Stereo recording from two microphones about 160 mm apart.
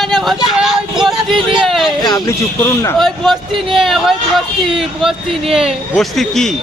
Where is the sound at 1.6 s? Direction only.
Centre (ahead or behind).